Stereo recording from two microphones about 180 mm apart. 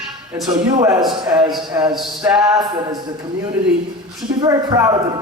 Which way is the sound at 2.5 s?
20° right (ahead or behind).